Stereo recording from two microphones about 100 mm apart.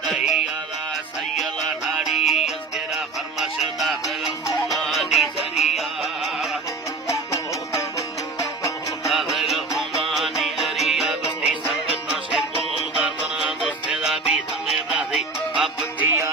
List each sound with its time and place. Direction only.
2.0 s music: 5° right (ahead or behind)
7.1 s music: 30° left (ahead or behind)
9.0 s music: centre (ahead or behind)
16.0 s music: 25° right (ahead or behind)